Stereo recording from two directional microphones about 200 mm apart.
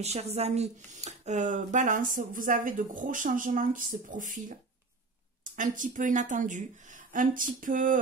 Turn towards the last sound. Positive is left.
turn(degrees=-40)  # may be behind; listen again after turning